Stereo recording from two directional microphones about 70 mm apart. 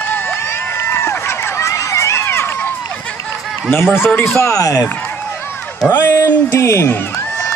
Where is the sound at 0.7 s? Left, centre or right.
Left.